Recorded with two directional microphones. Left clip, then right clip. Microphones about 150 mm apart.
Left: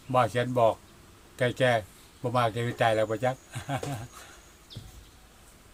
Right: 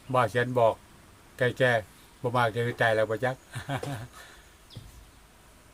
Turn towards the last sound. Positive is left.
turn(degrees=-25)  # may be behind; listen again after turning